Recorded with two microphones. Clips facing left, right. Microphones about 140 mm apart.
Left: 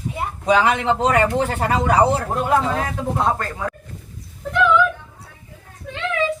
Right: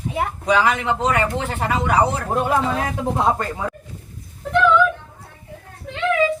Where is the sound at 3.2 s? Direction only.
15° right (ahead or behind).